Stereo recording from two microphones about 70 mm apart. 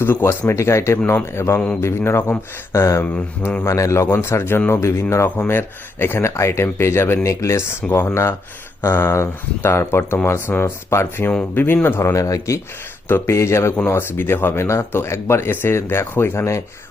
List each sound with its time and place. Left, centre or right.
0.0 s speech: left
12.1 s speech: left
13.1 s speech: left
14.2 s speech: left